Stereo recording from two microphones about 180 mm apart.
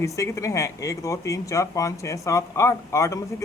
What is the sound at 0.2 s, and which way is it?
Speech, 15° left (ahead or behind).